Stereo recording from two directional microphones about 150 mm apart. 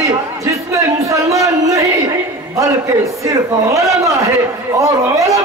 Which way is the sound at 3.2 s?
20° right (ahead or behind).